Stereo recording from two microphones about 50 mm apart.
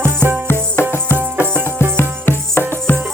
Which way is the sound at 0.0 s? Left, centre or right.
Right.